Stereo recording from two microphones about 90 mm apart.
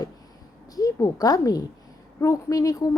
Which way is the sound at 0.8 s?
40° left (ahead or behind).